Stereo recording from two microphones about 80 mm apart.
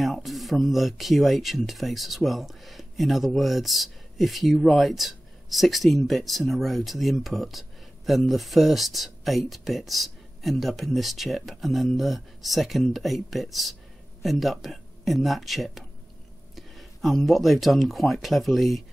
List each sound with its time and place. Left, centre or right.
0.0 s speech: centre